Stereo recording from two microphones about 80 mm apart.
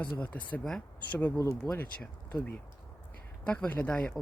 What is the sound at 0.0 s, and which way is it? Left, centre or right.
Speech, centre.